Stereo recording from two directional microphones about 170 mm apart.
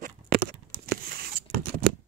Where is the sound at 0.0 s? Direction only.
55° right (ahead or behind).